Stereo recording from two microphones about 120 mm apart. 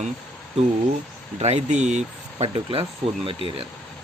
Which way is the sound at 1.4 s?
65° right (ahead or behind).